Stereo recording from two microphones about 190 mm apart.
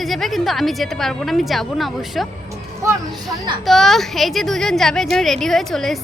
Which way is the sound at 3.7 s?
Centre (ahead or behind).